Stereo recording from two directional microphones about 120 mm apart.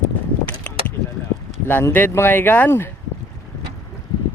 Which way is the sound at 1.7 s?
15° left (ahead or behind).